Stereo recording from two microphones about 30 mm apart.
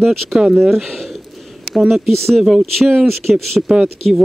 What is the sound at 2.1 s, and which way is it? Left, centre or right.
Speech, centre.